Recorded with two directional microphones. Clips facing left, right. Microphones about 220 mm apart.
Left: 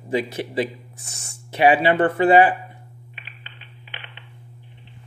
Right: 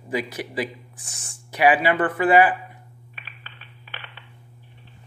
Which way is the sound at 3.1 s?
15° left (ahead or behind).